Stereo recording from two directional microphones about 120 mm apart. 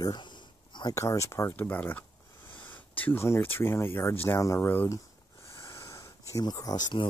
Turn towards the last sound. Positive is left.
turn(degrees=35)  # may be behind; listen again after turning